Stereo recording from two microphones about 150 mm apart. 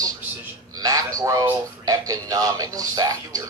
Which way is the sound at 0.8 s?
25° right (ahead or behind).